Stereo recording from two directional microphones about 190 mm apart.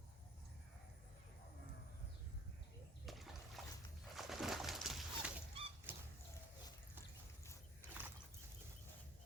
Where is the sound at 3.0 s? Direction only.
Centre (ahead or behind).